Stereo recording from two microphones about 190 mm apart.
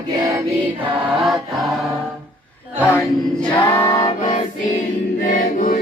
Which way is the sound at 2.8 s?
10° left (ahead or behind).